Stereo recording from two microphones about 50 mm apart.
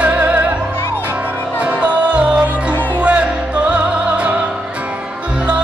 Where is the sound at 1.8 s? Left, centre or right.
Right.